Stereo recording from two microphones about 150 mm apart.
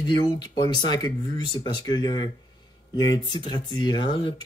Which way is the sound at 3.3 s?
30° left (ahead or behind).